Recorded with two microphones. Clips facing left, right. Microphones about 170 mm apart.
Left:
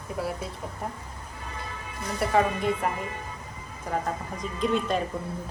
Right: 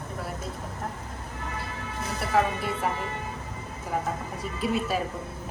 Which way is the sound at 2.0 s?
5° right (ahead or behind).